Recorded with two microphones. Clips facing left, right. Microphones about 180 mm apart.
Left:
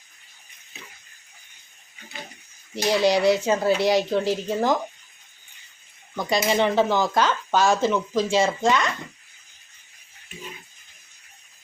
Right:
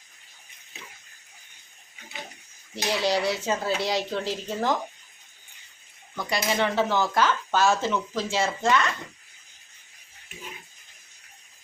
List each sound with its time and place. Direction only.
2.7 s speech: 15° left (ahead or behind)
6.1 s speech: 20° left (ahead or behind)